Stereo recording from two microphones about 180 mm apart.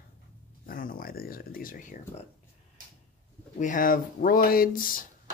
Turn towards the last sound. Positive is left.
turn(degrees=55)  # may be behind; listen again after turning